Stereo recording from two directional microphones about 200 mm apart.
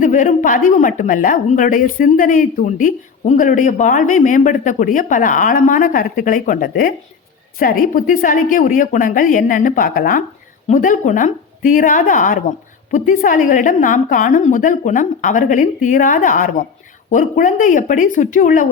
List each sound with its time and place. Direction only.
0.0 s a woman's voice: 40° left (ahead or behind)